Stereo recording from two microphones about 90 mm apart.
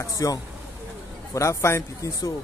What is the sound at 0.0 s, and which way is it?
A man's voice, 40° left (ahead or behind).